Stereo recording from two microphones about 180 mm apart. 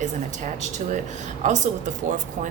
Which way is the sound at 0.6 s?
40° right (ahead or behind).